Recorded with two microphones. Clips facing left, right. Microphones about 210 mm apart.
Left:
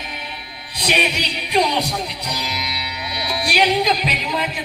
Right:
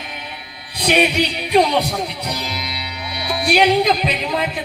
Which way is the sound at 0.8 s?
55° right (ahead or behind).